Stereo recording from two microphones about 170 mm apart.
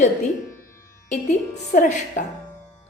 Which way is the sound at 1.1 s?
45° left (ahead or behind).